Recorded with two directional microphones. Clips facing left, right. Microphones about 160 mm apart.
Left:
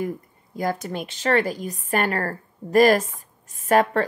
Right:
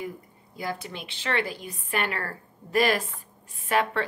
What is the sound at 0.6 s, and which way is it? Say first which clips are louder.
A woman's voice: left 8 dB; 45° left (ahead or behind).